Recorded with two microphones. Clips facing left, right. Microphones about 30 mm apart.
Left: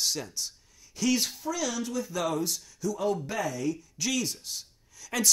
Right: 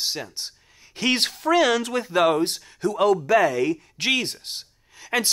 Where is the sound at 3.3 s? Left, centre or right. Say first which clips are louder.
Right 12 dB; right.